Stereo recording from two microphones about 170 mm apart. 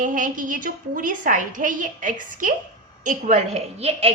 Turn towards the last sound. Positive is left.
turn(degrees=-40)  # may be behind; listen again after turning